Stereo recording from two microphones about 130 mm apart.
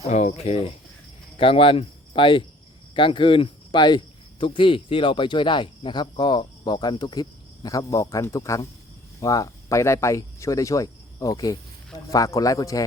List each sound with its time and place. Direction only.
0.0 s a man's voice: 60° left (ahead or behind); by 12.8 s 25° left (ahead or behind)